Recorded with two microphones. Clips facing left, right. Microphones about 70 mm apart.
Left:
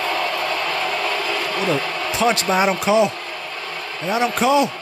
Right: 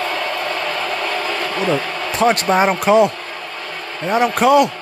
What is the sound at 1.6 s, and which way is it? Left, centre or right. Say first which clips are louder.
Speech: right 3 dB; right.